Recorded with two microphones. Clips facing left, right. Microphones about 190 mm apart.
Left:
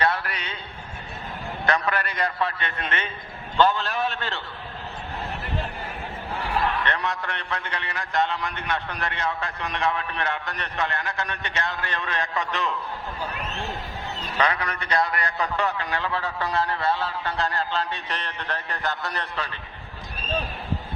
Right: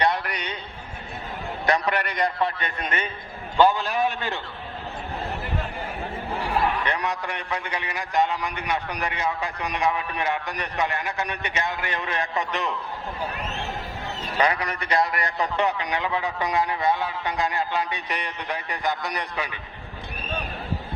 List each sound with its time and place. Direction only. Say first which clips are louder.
0.0 s a sound: right 1 dB; 15° right (ahead or behind)
1.6 s a man's voice: right 2 dB; 20° right (ahead or behind)
3.6 s a man's voice: right 2 dB; 15° right (ahead or behind)
6.7 s a man's voice: right 1 dB; 10° right (ahead or behind)
14.3 s a man's voice: right 2 dB; 20° right (ahead or behind)